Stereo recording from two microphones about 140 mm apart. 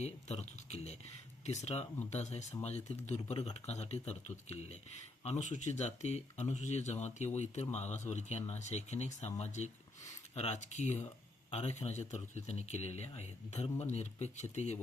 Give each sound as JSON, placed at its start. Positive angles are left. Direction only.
{"t": 0.0, "sound": "speech", "side_deg": 50}
{"t": 5.2, "sound": "speech", "side_deg": 55}